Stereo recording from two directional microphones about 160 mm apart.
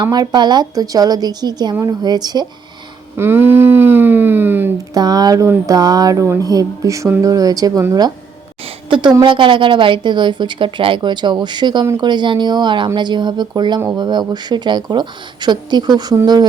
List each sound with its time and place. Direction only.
0.0 s speech: 25° right (ahead or behind)
3.2 s a sound: 15° right (ahead or behind)
4.9 s a woman's voice: 25° right (ahead or behind)